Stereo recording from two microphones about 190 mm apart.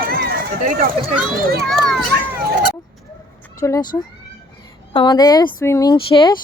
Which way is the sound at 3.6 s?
20° left (ahead or behind).